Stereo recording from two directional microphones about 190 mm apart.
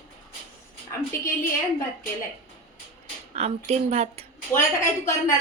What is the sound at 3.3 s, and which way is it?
Speech, 35° right (ahead or behind).